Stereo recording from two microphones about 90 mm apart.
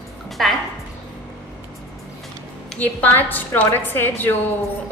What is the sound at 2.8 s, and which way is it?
A woman's voice, 20° left (ahead or behind).